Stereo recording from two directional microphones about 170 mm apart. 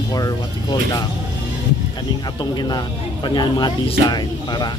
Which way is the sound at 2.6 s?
25° left (ahead or behind).